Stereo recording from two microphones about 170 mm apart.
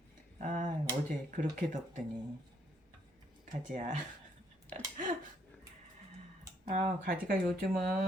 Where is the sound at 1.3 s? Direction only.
45° right (ahead or behind).